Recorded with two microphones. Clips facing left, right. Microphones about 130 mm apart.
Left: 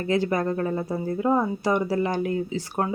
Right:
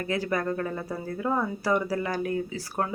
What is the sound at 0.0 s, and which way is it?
Speech, 25° left (ahead or behind).